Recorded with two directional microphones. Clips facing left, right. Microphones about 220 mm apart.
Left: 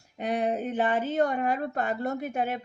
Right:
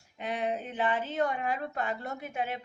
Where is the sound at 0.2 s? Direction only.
45° left (ahead or behind).